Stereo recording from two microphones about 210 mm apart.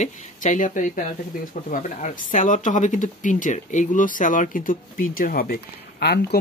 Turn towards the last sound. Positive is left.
turn(degrees=50)  # may be behind; listen again after turning